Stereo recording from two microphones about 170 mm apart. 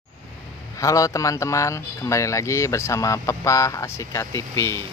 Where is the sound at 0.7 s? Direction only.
20° left (ahead or behind).